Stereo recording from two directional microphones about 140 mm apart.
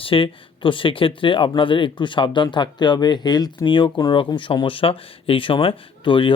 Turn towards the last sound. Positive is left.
turn(degrees=35)  # may be behind; listen again after turning